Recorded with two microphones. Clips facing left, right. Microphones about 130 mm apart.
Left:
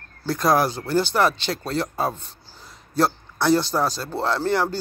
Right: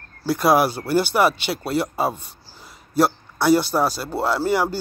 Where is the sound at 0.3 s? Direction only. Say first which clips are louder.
Right 2 dB; 5° right (ahead or behind).